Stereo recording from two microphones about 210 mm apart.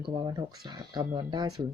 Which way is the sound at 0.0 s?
20° right (ahead or behind).